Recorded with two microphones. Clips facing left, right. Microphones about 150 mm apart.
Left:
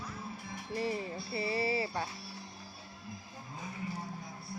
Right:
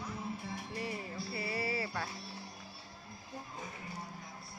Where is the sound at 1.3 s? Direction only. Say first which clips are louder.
Left 5 dB; 25° left (ahead or behind).